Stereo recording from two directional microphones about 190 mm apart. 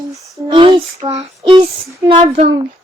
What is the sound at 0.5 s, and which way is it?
Child singing, 25° right (ahead or behind).